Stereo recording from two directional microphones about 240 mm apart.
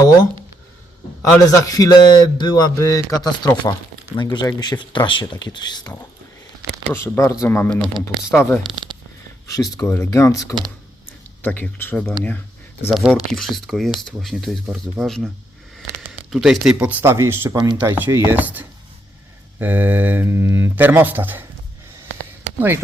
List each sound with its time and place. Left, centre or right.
1.2 s a man's voice: centre
6.9 s a man's voice: centre
8.6 s speech: centre
9.5 s a man's voice: centre